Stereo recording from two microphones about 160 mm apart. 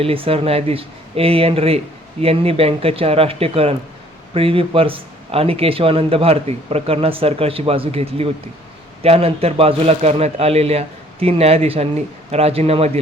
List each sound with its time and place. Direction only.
0.0 s speech: 35° right (ahead or behind)